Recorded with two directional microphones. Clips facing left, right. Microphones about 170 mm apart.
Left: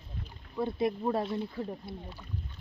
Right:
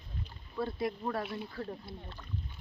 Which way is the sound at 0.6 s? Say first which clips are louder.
Left 4 dB; 20° left (ahead or behind).